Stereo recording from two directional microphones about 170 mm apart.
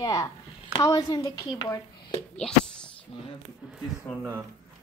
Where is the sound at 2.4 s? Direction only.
5° left (ahead or behind).